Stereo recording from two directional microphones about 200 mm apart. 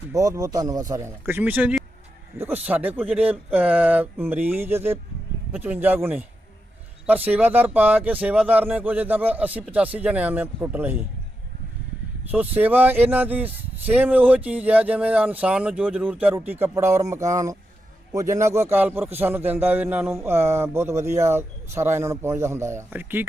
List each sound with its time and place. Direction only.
0.1 s speech: 15° right (ahead or behind)
12.3 s speech: 10° right (ahead or behind)